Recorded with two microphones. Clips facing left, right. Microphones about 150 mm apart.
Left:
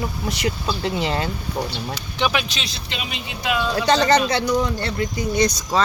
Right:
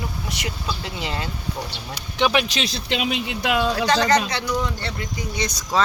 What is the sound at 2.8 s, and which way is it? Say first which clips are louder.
Speech: right 7 dB; 70° right (ahead or behind).